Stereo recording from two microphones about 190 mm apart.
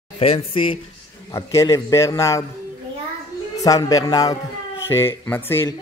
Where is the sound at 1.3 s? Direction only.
15° left (ahead or behind).